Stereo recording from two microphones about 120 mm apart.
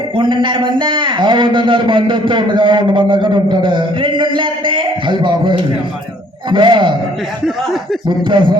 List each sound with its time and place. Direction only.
0.2 s a man's voice: 45° right (ahead or behind)
8.0 s speech: 40° right (ahead or behind)